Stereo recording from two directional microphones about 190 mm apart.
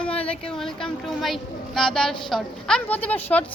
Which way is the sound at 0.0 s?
5° left (ahead or behind).